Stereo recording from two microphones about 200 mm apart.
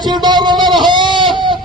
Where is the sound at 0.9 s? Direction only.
25° right (ahead or behind).